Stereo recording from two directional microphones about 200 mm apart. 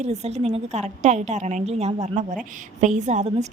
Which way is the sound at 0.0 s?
35° right (ahead or behind).